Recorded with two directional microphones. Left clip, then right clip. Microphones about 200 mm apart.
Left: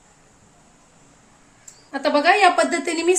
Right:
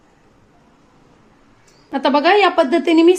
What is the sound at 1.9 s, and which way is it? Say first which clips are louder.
Speech: right 3 dB; 45° right (ahead or behind).